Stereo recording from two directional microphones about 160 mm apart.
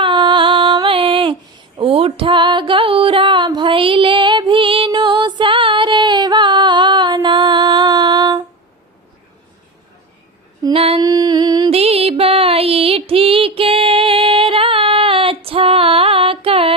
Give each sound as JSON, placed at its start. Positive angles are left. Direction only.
{"t": 0.0, "sound": "female singing", "side_deg": -30}
{"t": 10.6, "sound": "female singing", "side_deg": -35}
{"t": 11.0, "sound": "a sound", "side_deg": -25}
{"t": 11.7, "sound": "music", "side_deg": -40}